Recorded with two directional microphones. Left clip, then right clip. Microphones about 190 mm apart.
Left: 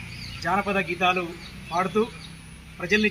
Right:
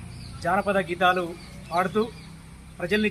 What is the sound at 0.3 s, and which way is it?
Speech, 25° right (ahead or behind).